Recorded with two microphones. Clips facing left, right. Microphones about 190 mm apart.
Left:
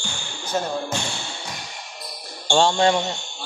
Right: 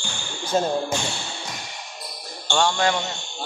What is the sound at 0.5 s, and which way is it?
Speech, 25° right (ahead or behind).